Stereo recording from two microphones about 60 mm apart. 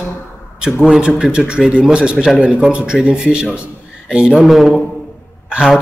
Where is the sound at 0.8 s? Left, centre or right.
Centre.